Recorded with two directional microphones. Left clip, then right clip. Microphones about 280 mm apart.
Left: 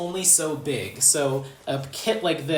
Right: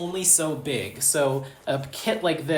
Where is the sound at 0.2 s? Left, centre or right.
Centre.